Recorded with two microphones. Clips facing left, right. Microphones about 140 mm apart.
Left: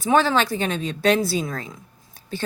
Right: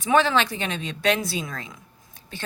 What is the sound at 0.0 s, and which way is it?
A woman's voice, 35° left (ahead or behind).